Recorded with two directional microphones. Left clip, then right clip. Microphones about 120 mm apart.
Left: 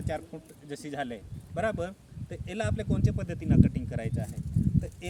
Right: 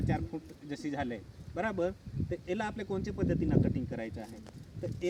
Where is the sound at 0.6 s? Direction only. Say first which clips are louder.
Left 2 dB; 35° left (ahead or behind).